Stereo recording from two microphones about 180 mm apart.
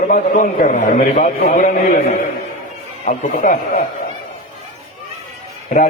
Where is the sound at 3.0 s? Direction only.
50° left (ahead or behind).